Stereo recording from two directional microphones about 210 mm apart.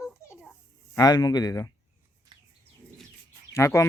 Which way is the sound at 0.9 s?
15° left (ahead or behind).